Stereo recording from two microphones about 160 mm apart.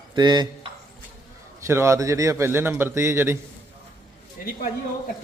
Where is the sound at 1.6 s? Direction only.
15° right (ahead or behind).